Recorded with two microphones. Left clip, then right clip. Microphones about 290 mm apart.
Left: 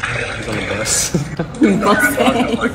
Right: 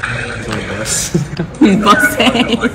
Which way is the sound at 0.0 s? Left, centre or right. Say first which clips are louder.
Right 1 dB; left.